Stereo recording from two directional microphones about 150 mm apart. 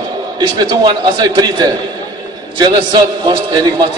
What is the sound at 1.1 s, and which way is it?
A man's voice, 30° right (ahead or behind).